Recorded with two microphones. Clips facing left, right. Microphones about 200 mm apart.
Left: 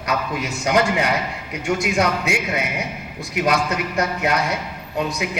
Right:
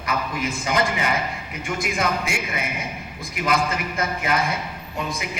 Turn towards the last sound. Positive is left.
turn(degrees=70)  # may be behind; listen again after turning